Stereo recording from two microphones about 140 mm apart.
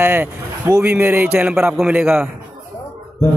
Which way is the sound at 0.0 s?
15° right (ahead or behind).